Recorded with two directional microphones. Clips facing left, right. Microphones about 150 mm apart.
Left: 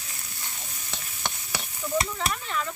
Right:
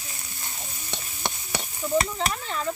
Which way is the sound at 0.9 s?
30° right (ahead or behind).